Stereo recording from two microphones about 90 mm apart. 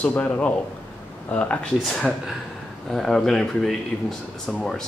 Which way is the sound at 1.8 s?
5° left (ahead or behind).